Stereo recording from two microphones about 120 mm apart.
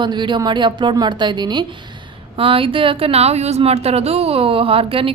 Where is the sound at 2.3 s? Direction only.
50° right (ahead or behind).